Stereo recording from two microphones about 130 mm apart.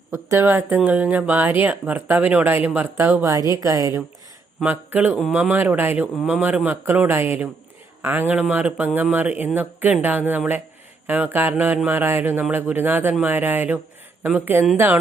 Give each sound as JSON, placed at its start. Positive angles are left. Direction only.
{"t": 0.1, "sound": "speech", "side_deg": -20}
{"t": 4.6, "sound": "speech", "side_deg": -10}